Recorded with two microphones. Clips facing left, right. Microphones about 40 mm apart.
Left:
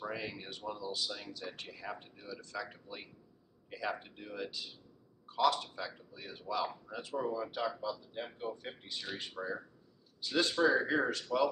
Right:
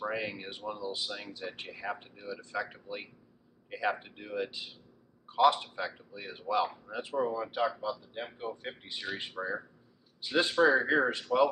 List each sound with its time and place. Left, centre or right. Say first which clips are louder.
0.0 s speech: right 5 dB; right